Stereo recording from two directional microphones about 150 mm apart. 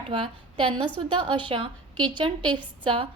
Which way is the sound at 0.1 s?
35° right (ahead or behind).